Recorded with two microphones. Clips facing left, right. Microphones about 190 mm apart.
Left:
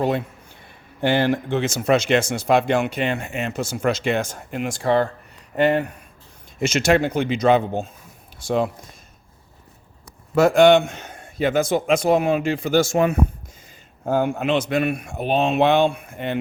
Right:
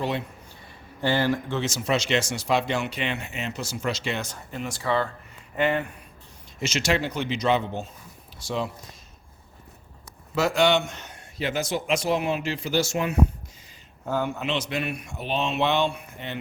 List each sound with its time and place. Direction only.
1.0 s speech: 60° left (ahead or behind)
5.5 s speech: 40° left (ahead or behind)
6.6 s speech: 50° left (ahead or behind)
10.3 s speech: 50° left (ahead or behind)